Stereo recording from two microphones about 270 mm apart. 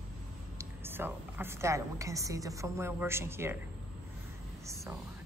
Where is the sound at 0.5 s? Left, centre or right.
Centre.